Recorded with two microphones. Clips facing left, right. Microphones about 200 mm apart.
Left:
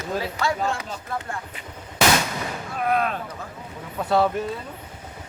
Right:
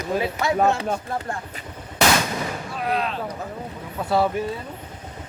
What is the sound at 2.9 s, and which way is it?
Speech, 50° left (ahead or behind).